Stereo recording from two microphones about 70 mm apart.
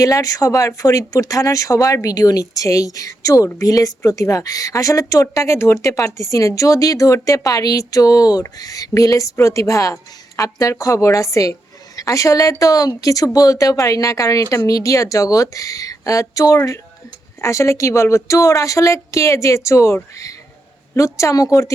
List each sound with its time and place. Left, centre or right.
0.0 s speech: left